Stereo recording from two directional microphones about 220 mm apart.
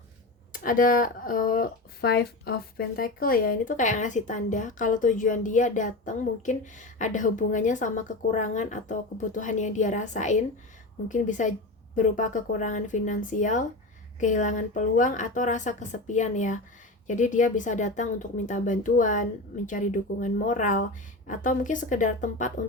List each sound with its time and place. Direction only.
0.5 s speech: 40° left (ahead or behind)